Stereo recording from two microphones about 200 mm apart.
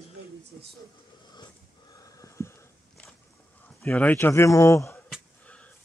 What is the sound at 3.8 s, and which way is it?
Speech, 10° left (ahead or behind).